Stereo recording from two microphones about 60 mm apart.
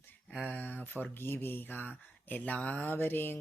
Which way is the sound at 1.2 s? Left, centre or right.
Left.